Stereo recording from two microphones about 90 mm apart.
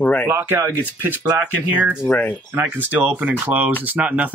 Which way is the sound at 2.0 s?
20° left (ahead or behind).